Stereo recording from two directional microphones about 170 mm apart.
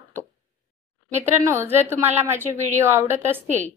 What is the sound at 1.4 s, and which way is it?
A woman's voice, 15° right (ahead or behind).